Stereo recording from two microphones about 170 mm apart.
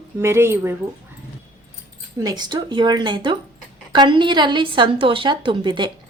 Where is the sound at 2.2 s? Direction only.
25° right (ahead or behind).